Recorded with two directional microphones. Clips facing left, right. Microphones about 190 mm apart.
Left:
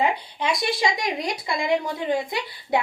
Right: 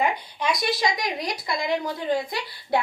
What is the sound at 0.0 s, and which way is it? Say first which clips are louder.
Speech: left 1 dB; 25° left (ahead or behind).